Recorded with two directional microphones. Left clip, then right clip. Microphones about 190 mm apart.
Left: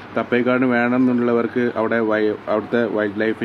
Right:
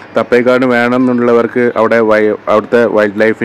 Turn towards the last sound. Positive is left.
turn(degrees=-30)  # may be behind; listen again after turning